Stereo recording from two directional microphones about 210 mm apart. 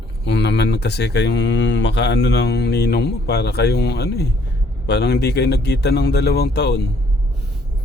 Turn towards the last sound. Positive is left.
turn(degrees=50)  # may be behind; listen again after turning